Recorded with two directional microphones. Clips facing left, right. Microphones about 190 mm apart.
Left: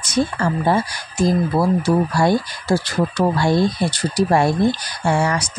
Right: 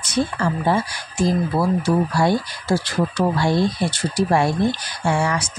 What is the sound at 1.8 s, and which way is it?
Speech, 45° left (ahead or behind).